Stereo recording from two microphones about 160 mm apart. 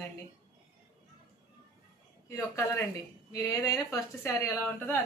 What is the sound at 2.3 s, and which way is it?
A woman's voice, 20° left (ahead or behind).